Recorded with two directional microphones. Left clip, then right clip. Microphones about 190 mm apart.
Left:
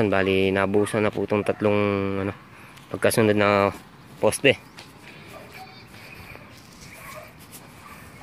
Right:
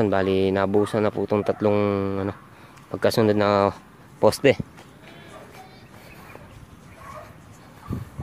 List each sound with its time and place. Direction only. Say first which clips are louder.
0.0 s speech: even; 5° right (ahead or behind)